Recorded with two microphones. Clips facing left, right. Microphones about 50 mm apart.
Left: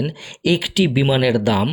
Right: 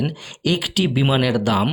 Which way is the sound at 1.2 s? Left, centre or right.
Centre.